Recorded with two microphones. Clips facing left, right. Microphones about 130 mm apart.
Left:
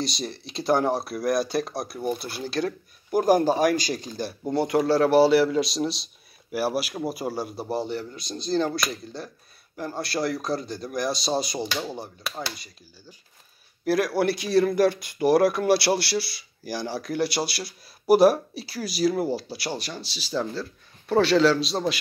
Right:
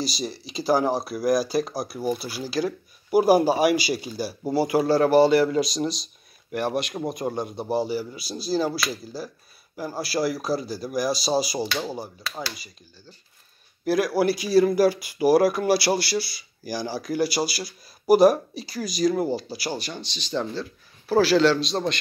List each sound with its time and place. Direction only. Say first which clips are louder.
0.0 s speech: right 1 dB; centre (ahead or behind)
13.8 s speech: right 1 dB; centre (ahead or behind)